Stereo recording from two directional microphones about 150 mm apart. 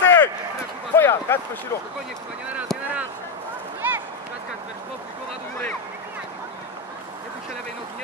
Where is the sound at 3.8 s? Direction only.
15° right (ahead or behind).